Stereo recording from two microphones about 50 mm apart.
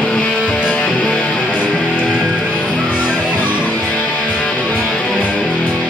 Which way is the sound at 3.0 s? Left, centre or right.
Right.